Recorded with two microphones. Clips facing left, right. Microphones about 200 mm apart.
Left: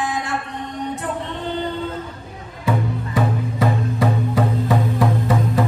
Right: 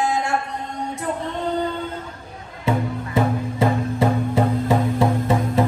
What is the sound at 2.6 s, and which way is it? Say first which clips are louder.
Music: even; 25° right (ahead or behind).